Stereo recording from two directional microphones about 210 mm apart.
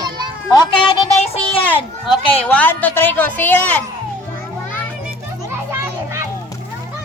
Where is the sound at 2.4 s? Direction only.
5° left (ahead or behind).